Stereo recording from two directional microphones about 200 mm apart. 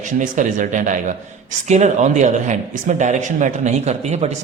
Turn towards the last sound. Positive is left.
turn(degrees=-35)  # may be behind; listen again after turning